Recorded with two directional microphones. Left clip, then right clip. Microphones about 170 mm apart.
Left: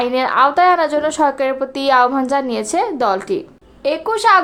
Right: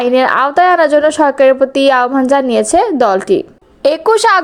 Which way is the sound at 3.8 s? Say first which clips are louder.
Right 5 dB; 50° right (ahead or behind).